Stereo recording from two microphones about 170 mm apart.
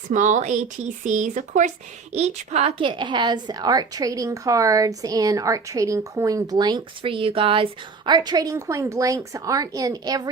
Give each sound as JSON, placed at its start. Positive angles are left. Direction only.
{"t": 0.1, "sound": "a woman's voice", "side_deg": -45}